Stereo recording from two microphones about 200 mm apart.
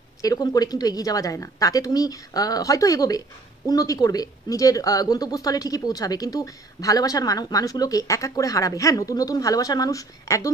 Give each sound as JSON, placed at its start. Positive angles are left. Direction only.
{"t": 0.2, "sound": "speech", "side_deg": 20}